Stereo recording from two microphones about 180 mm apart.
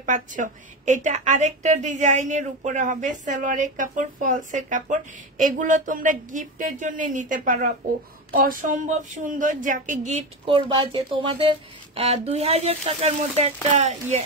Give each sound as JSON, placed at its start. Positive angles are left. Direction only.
{"t": 0.0, "sound": "a woman's voice", "side_deg": -45}
{"t": 10.4, "sound": "speech", "side_deg": -30}